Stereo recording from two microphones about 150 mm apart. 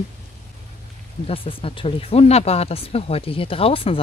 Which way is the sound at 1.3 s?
40° left (ahead or behind).